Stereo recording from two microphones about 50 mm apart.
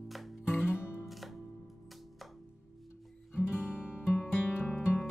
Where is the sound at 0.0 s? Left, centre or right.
Centre.